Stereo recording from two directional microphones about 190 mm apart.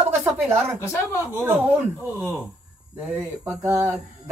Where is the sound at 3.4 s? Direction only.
15° right (ahead or behind).